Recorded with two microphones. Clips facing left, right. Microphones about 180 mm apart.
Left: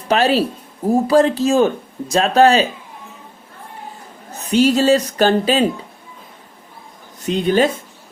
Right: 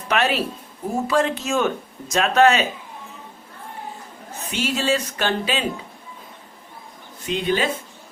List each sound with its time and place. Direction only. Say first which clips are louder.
0.1 s speech: left 6 dB; 35° left (ahead or behind)
4.5 s speech: left 10 dB; 40° left (ahead or behind)
7.3 s speech: left 7 dB; 45° left (ahead or behind)